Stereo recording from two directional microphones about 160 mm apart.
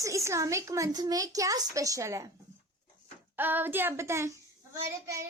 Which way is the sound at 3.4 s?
10° right (ahead or behind).